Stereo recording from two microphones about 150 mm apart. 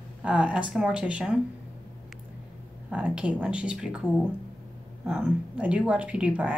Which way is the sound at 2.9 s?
10° right (ahead or behind).